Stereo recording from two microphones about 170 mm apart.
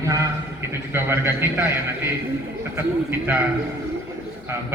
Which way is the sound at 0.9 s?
15° right (ahead or behind).